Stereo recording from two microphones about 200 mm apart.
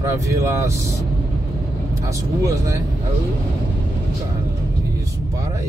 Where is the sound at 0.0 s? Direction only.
15° right (ahead or behind).